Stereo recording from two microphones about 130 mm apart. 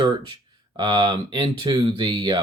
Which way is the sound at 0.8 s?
35° right (ahead or behind).